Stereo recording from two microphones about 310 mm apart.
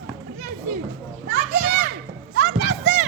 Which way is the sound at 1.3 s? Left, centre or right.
Right.